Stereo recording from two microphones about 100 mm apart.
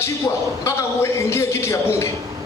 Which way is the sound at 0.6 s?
25° left (ahead or behind).